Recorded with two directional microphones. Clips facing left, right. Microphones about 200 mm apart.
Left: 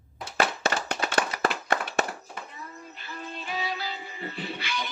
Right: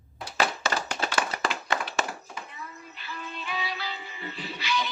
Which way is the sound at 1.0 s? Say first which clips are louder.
Left 3 dB; 55° left (ahead or behind).